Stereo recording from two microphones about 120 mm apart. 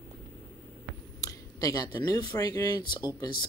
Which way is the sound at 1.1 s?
30° left (ahead or behind).